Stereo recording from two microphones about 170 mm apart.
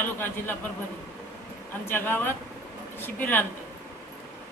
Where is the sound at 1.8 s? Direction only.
15° left (ahead or behind).